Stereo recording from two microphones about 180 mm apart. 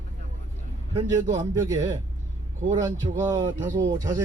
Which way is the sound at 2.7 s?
20° right (ahead or behind).